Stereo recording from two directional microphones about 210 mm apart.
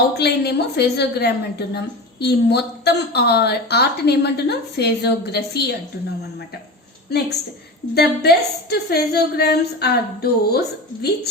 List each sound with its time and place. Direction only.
0.1 s a woman's voice: 50° left (ahead or behind)
7.9 s a woman's voice: 50° left (ahead or behind)